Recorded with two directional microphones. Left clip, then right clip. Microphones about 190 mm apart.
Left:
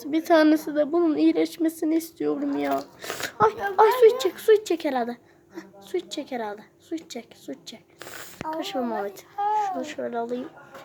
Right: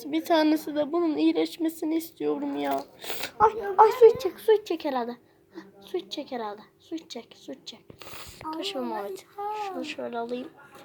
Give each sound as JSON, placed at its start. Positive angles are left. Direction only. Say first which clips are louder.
{"t": 0.0, "sound": "a woman's voice", "louder": "left 4 dB", "side_deg": 15}